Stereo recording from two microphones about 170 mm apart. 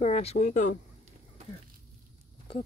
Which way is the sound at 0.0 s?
40° left (ahead or behind).